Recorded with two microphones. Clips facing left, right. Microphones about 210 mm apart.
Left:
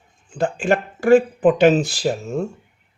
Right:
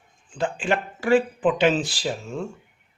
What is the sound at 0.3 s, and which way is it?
Speech, 45° left (ahead or behind).